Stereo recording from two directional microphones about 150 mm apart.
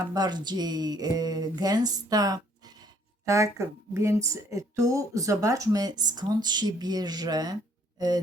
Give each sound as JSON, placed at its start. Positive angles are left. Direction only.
{"t": 0.1, "sound": "speech", "side_deg": -25}